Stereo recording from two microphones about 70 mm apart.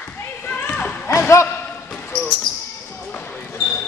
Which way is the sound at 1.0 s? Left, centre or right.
Left.